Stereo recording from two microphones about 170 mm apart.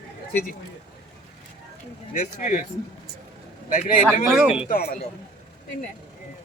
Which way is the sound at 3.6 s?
50° left (ahead or behind).